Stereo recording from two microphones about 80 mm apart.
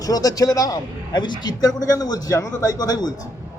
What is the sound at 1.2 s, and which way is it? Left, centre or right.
Speech, left.